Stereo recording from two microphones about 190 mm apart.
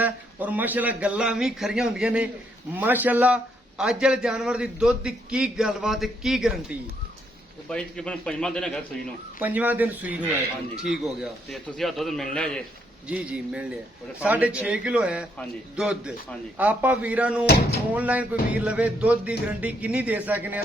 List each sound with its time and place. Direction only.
0.0 s a man's voice: 10° right (ahead or behind)
7.7 s a man's voice: 5° left (ahead or behind)
9.4 s music: 10° right (ahead or behind)
10.8 s a man's voice: 5° right (ahead or behind)
13.1 s music: 5° right (ahead or behind)
14.2 s a man's voice: 5° right (ahead or behind)
16.6 s music: 10° right (ahead or behind)
17.4 s speech: 55° left (ahead or behind)
17.9 s music: 10° right (ahead or behind)